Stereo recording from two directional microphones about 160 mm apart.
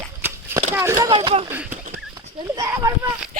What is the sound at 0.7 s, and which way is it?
Speech, 15° right (ahead or behind).